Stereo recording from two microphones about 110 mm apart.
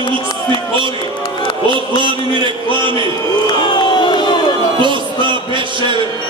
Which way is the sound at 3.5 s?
45° left (ahead or behind).